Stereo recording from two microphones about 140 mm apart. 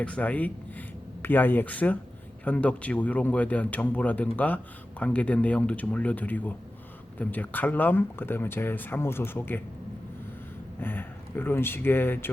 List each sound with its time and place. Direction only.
0.0 s speech: 10° left (ahead or behind)
10.8 s speech: 15° left (ahead or behind)